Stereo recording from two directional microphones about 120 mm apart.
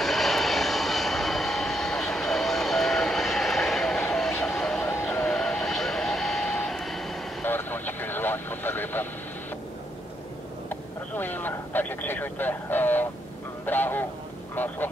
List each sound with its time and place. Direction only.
0.0 s vehicle: centre (ahead or behind)
4.8 s vehicle: 20° left (ahead or behind); by 7.2 s centre (ahead or behind)
7.4 s vehicle: 15° left (ahead or behind)
10.7 s a sound: 15° left (ahead or behind)
14.5 s vehicle: 15° left (ahead or behind)